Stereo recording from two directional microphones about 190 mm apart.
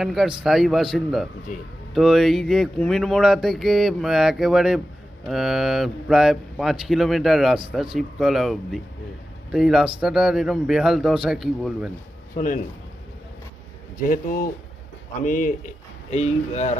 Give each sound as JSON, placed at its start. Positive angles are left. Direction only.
{"t": 0.0, "sound": "speech", "side_deg": 0}
{"t": 1.5, "sound": "speech", "side_deg": 45}
{"t": 1.9, "sound": "speech", "side_deg": 0}
{"t": 12.4, "sound": "speech", "side_deg": 45}
{"t": 15.2, "sound": "a man's voice", "side_deg": 40}